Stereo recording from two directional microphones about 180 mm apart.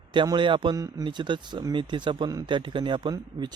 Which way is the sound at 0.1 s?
25° right (ahead or behind).